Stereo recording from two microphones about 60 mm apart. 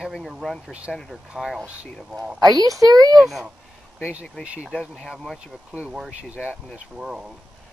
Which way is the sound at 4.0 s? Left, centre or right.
Centre.